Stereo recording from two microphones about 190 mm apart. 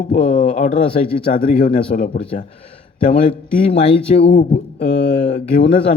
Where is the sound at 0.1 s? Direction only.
45° left (ahead or behind).